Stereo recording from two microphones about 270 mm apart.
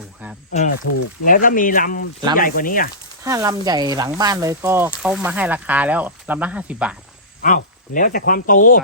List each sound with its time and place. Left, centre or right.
0.5 s speech: left
3.2 s speech: centre
7.4 s speech: left